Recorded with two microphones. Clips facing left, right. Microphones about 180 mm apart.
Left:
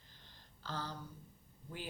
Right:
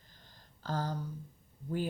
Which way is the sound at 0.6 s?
45° right (ahead or behind).